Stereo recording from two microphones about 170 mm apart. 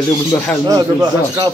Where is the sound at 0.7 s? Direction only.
20° right (ahead or behind).